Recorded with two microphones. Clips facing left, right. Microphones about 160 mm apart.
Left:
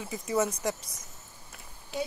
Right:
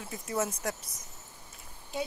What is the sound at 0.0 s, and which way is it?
Speech, centre (ahead or behind).